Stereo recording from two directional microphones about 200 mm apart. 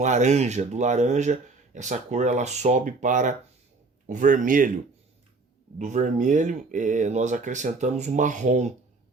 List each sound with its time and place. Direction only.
0.0 s speech: 35° right (ahead or behind)
5.8 s speech: 35° right (ahead or behind)